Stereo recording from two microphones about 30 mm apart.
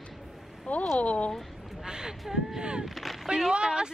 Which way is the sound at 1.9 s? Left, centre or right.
Right.